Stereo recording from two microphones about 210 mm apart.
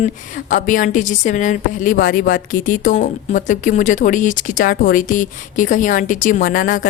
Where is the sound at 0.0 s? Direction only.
40° left (ahead or behind).